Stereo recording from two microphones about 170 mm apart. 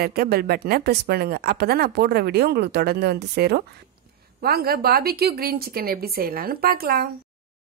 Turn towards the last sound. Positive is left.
turn(degrees=-60)  # may be behind; listen again after turning